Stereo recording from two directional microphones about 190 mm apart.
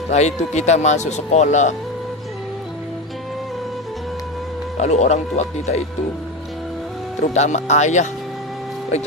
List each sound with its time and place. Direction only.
0.1 s speech: 35° left (ahead or behind)
4.8 s speech: 35° left (ahead or behind)
7.2 s speech: 35° left (ahead or behind)